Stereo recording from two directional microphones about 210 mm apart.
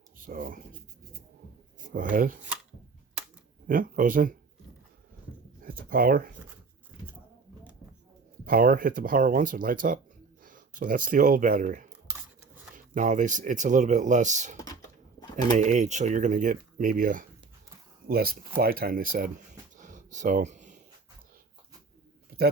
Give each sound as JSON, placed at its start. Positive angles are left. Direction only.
{"t": 0.2, "sound": "speech", "side_deg": -40}
{"t": 1.9, "sound": "speech", "side_deg": -40}
{"t": 3.7, "sound": "speech", "side_deg": -40}
{"t": 5.6, "sound": "speech", "side_deg": -45}
{"t": 8.4, "sound": "speech", "side_deg": -45}
{"t": 15.2, "sound": "a sound", "side_deg": 20}
{"t": 15.5, "sound": "speech", "side_deg": -35}
{"t": 19.7, "sound": "a sound", "side_deg": -35}